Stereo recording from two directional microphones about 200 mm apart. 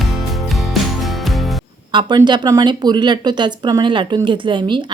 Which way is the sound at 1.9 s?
20° right (ahead or behind).